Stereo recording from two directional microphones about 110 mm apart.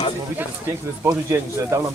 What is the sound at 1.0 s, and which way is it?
Speech, 25° right (ahead or behind).